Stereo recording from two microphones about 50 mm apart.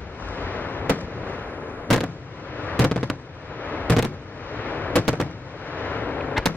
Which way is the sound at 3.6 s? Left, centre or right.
Left.